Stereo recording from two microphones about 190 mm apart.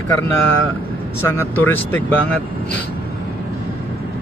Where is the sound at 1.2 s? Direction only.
10° left (ahead or behind).